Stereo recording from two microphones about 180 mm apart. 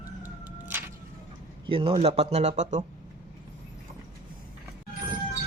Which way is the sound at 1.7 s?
30° right (ahead or behind).